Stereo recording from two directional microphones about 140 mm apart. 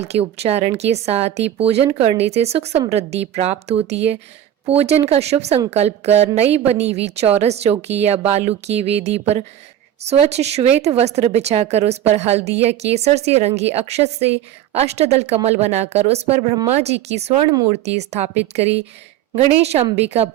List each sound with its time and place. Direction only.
0.0 s speech: 50° right (ahead or behind)